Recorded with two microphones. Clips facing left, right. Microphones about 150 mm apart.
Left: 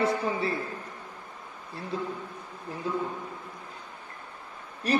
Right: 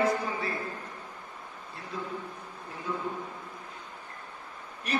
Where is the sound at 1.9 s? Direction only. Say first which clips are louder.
Left 5 dB; 30° left (ahead or behind).